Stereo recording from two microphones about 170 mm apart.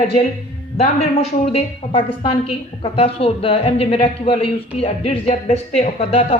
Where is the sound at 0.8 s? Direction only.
40° left (ahead or behind).